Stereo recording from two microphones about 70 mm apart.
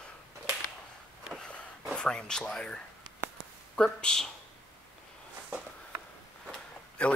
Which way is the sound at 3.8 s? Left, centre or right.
Centre.